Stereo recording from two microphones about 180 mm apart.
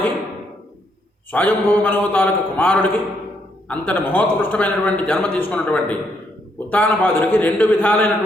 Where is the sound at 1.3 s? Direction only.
10° left (ahead or behind).